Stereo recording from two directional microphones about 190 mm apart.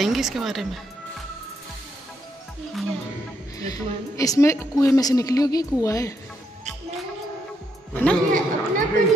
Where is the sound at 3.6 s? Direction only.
20° left (ahead or behind).